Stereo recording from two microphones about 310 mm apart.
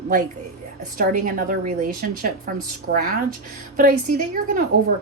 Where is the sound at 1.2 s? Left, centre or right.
Right.